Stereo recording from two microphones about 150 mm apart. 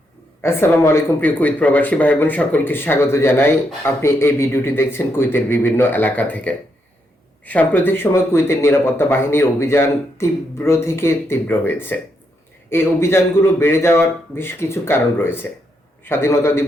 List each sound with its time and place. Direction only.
0.4 s speech: 15° left (ahead or behind)